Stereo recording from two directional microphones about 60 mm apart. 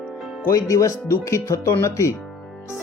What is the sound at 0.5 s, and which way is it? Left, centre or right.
Speech, left.